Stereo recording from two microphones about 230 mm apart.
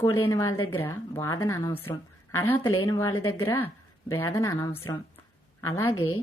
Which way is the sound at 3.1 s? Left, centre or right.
Left.